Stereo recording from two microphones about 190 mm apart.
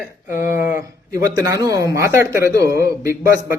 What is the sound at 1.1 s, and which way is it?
A man's voice, 20° right (ahead or behind).